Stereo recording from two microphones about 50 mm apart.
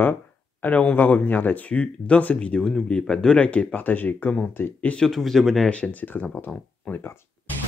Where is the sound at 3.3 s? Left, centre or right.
Left.